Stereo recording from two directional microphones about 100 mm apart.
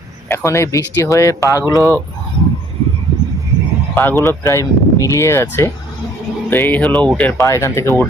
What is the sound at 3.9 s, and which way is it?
Speech, 20° left (ahead or behind).